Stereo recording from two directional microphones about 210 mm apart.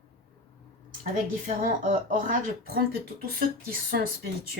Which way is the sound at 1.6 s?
40° right (ahead or behind).